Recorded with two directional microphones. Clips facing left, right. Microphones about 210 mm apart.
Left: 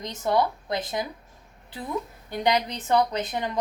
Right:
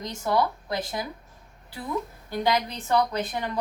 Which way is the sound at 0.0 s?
20° left (ahead or behind).